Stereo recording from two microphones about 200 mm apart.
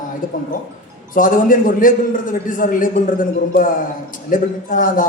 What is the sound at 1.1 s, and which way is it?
A man's voice, 40° left (ahead or behind).